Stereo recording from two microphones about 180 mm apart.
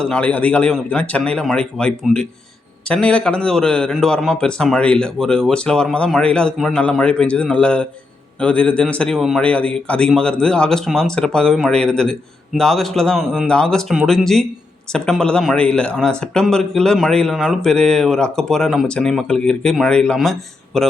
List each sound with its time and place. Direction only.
0.0 s a man's voice: 5° left (ahead or behind)